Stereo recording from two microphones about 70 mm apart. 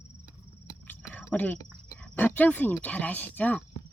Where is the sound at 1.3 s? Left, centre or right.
Left.